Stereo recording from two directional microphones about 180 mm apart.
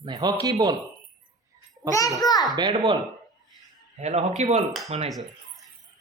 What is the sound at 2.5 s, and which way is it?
Speech, 25° right (ahead or behind).